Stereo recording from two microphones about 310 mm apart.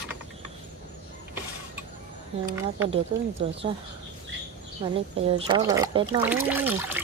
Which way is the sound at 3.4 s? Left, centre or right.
Centre.